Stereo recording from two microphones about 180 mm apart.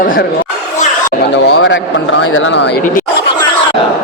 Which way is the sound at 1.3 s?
90° left.